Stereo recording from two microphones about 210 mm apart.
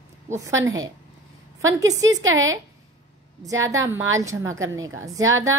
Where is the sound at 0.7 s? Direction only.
15° right (ahead or behind).